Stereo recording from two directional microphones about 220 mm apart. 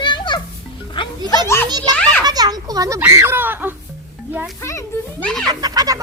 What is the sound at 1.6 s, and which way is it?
Children playing, 20° right (ahead or behind).